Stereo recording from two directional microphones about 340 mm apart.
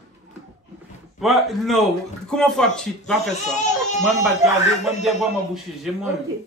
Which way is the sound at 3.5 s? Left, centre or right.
Left.